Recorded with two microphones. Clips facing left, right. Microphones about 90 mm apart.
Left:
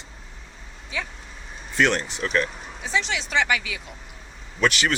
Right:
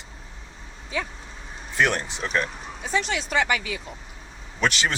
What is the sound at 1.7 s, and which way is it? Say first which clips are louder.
Speech: left 1 dB; 15° right (ahead or behind).